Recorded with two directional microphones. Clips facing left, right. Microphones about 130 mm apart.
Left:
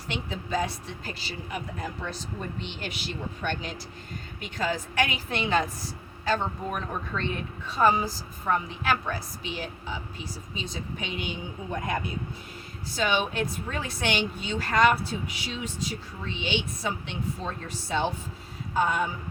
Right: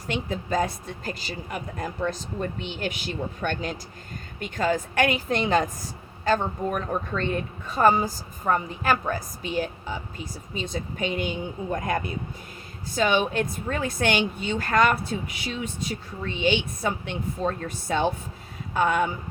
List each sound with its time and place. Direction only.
0.1 s a woman's voice: 45° right (ahead or behind)
13.0 s a woman's voice: 45° right (ahead or behind); by 19.0 s 60° right (ahead or behind)